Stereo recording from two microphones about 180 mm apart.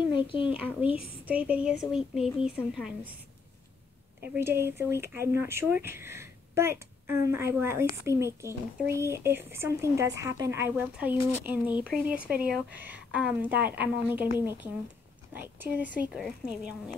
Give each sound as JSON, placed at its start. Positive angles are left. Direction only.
{"t": 0.1, "sound": "a child's voice", "side_deg": 30}
{"t": 0.9, "sound": "speech", "side_deg": -5}
{"t": 4.2, "sound": "speech", "side_deg": -10}